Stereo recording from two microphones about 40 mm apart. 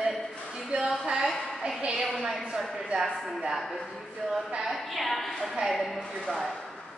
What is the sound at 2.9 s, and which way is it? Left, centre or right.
Speech, right.